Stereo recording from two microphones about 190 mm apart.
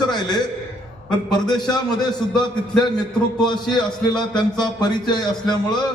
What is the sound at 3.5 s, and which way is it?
Speech, 25° left (ahead or behind).